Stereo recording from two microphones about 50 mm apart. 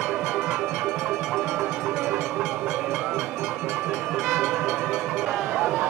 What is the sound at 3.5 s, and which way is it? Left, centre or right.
Train, right.